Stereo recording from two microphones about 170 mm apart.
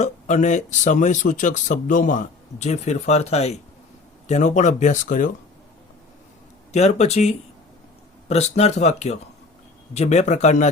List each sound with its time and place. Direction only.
0.0 s speech: 45° left (ahead or behind)
6.7 s speech: 40° left (ahead or behind)